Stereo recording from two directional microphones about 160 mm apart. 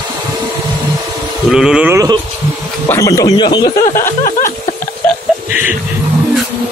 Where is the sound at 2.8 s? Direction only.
20° left (ahead or behind).